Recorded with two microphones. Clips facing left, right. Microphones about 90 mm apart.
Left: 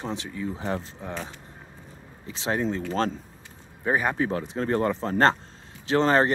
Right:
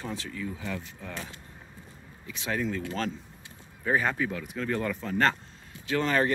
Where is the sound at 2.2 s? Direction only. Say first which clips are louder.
Left 4 dB; 30° left (ahead or behind).